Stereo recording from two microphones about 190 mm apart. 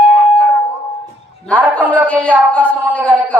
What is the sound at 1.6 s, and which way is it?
Speech, 10° right (ahead or behind).